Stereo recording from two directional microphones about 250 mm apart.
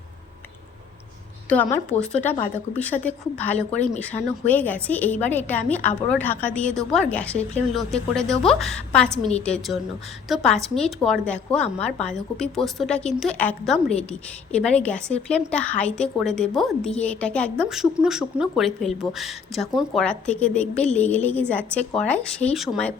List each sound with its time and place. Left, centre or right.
1.5 s a woman's voice: centre